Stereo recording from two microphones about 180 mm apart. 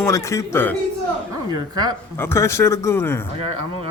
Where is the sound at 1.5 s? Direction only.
20° right (ahead or behind).